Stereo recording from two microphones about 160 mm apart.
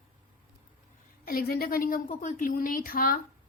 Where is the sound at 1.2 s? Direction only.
65° left (ahead or behind).